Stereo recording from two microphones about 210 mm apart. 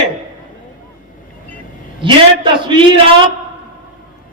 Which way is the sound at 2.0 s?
25° right (ahead or behind).